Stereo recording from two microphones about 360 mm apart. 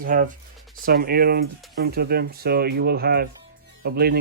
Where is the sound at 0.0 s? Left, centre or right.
Right.